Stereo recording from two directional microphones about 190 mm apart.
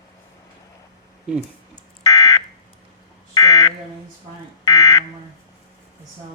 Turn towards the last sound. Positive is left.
turn(degrees=20)  # may be behind; listen again after turning